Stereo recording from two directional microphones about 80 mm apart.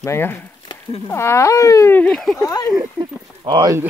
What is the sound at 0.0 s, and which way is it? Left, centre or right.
Speech, left.